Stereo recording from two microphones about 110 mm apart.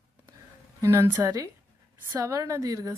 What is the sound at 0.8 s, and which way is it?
A woman's voice, 25° right (ahead or behind).